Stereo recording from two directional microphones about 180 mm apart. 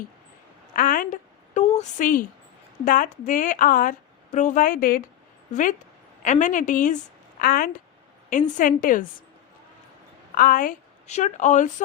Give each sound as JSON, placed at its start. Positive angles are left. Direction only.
{"t": 0.8, "sound": "a sound", "side_deg": 50}
{"t": 2.8, "sound": "a woman's voice", "side_deg": 45}
{"t": 6.2, "sound": "a woman's voice", "side_deg": 45}
{"t": 10.3, "sound": "a woman's voice", "side_deg": 50}